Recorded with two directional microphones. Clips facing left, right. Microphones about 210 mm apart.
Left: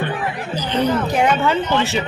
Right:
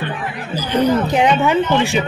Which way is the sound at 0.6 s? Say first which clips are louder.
Right 4 dB; 10° right (ahead or behind).